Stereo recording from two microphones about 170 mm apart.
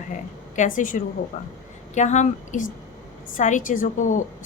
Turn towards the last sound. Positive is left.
turn(degrees=45)  # may be behind; listen again after turning